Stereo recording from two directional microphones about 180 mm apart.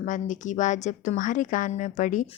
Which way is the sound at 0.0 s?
45° left (ahead or behind).